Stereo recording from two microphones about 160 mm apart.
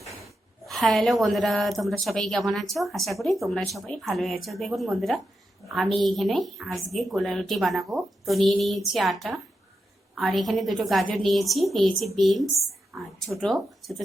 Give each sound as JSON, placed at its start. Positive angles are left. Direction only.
{"t": 0.6, "sound": "a woman's voice", "side_deg": 0}